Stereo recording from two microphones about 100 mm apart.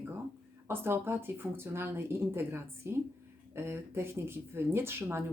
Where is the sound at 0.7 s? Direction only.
25° right (ahead or behind).